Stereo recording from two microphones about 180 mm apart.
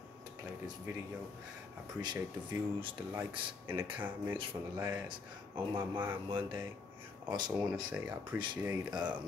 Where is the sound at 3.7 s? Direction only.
10° right (ahead or behind).